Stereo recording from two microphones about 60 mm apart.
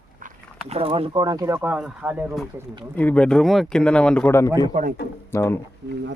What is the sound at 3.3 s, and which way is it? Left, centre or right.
Speech, centre.